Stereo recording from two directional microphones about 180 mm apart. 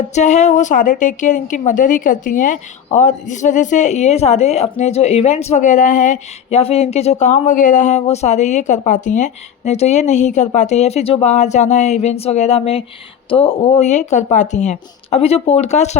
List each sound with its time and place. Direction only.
0.1 s a woman's voice: 40° left (ahead or behind)